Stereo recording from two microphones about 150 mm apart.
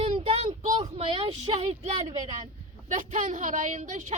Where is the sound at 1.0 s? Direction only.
35° right (ahead or behind).